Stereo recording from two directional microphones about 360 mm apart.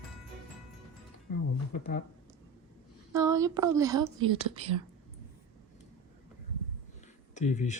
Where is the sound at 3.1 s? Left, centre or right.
Centre.